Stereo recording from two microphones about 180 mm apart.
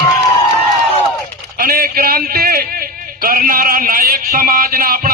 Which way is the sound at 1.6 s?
55° right (ahead or behind).